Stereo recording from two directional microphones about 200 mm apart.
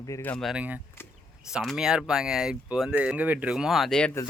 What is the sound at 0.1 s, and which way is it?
Speech, 10° left (ahead or behind).